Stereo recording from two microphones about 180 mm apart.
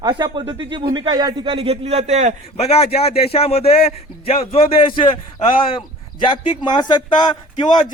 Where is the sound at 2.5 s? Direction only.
35° left (ahead or behind).